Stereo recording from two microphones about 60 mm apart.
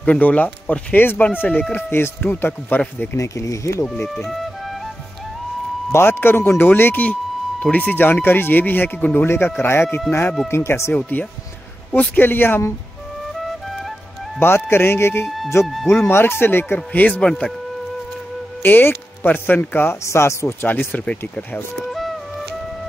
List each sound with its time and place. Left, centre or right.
0.0 s speech: left
3.2 s speech: left
4.3 s music: centre
5.9 s speech: left
11.0 s speech: left
13.4 s music: centre
14.4 s speech: left
15.2 s speech: centre
16.1 s speech: left
17.2 s speech: centre
18.6 s speech: left
20.1 s speech: left
20.6 s speech: left